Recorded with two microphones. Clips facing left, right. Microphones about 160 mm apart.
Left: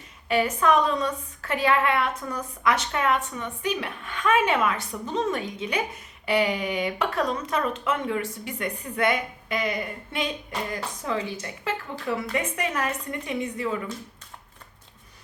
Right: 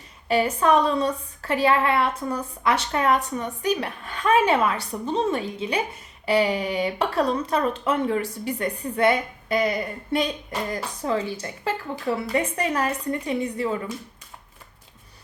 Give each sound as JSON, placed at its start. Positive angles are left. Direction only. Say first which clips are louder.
{"t": 0.3, "sound": "a woman's voice", "louder": "right 2 dB", "side_deg": -35}